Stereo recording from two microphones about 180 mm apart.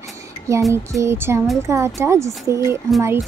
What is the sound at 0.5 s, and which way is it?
Speech, 15° right (ahead or behind).